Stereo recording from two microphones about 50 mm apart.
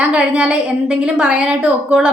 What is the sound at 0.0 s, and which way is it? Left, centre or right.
A woman's voice, right.